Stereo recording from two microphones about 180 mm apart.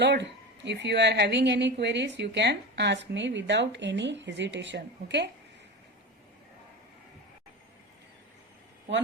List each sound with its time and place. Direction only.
0.0 s a woman's voice: 70° right (ahead or behind)